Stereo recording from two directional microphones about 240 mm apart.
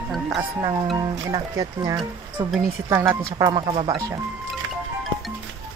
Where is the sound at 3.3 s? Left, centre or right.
Centre.